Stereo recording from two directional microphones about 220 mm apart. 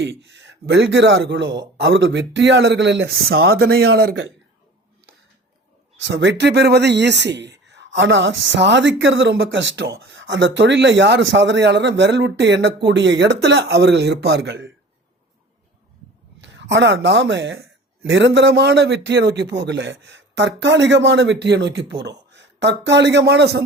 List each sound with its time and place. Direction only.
0.0 s speech: 55° right (ahead or behind)
6.0 s speech: 55° right (ahead or behind)
16.4 s a man's voice: 55° right (ahead or behind)